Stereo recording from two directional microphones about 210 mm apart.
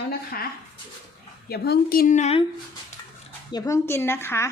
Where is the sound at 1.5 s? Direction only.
45° left (ahead or behind); by 2.4 s 30° left (ahead or behind).